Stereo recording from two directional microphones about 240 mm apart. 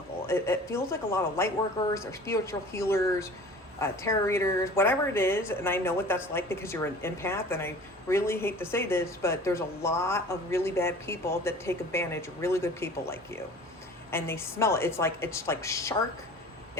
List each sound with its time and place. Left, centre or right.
0.3 s a woman's voice: centre